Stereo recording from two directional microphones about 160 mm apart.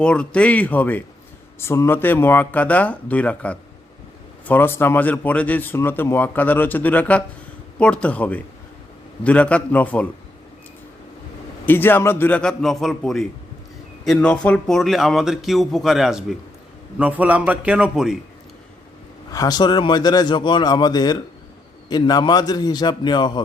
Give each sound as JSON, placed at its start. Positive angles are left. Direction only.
{"t": 0.0, "sound": "speech", "side_deg": 5}
{"t": 11.6, "sound": "a man's voice", "side_deg": 10}
{"t": 19.3, "sound": "speech", "side_deg": 25}